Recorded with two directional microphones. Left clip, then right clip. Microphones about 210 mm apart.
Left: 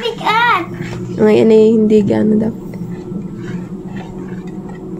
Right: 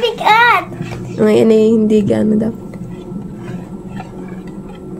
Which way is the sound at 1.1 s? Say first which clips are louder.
Left 1 dB; centre (ahead or behind).